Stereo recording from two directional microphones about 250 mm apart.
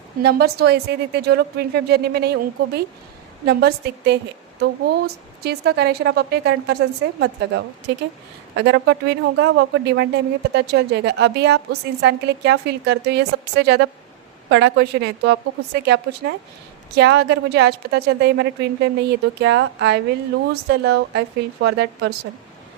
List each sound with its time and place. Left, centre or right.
0.2 s a woman's voice: right
7.9 s a woman's voice: right